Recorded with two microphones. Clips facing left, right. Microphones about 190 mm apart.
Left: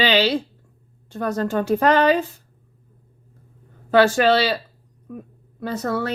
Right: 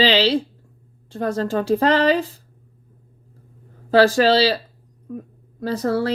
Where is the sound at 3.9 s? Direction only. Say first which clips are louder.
Right 1 dB; 35° right (ahead or behind).